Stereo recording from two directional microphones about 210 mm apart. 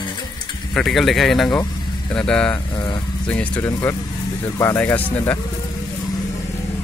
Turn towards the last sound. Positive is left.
turn(degrees=10)  # may be behind; listen again after turning